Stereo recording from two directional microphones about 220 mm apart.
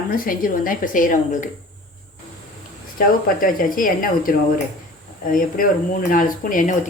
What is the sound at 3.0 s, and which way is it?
A woman's voice, 40° left (ahead or behind).